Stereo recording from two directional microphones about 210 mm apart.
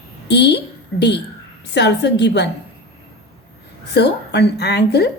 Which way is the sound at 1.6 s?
55° left (ahead or behind).